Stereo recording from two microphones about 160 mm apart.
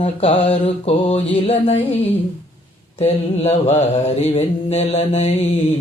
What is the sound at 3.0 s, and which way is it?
Mantra, 40° left (ahead or behind).